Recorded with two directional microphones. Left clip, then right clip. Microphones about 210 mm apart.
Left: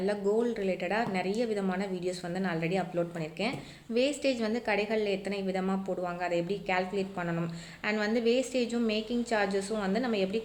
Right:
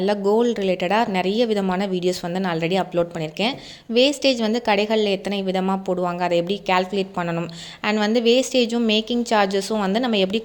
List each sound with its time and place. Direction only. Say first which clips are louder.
0.0 s a woman's voice: right 10 dB; 40° right (ahead or behind)